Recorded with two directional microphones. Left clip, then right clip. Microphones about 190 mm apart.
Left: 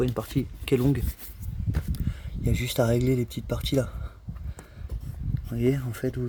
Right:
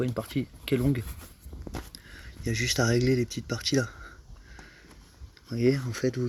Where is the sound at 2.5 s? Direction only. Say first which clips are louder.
Left 1 dB; 20° left (ahead or behind).